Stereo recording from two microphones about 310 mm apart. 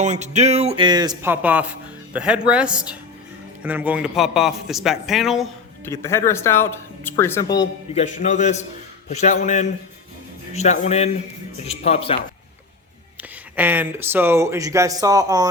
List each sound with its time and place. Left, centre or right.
0.0 s a man's voice: right; by 7.4 s centre
7.9 s a man's voice: left
13.6 s speech: centre